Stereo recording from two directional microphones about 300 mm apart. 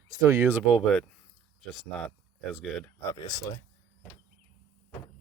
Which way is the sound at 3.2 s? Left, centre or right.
Centre.